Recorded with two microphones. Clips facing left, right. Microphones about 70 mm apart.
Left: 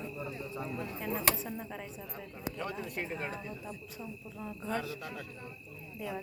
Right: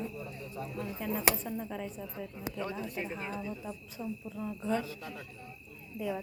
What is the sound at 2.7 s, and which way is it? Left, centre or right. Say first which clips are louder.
Speech: right 1 dB; left.